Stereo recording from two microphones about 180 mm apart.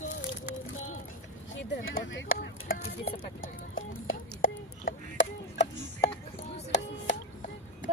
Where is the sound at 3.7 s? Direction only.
90° left.